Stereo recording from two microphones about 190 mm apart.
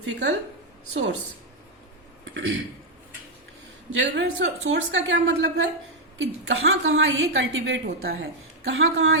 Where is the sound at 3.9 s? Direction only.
80° right.